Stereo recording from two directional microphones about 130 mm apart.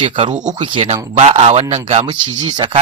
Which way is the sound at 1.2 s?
50° right (ahead or behind).